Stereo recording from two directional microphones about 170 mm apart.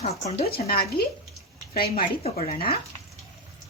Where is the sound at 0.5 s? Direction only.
65° left (ahead or behind).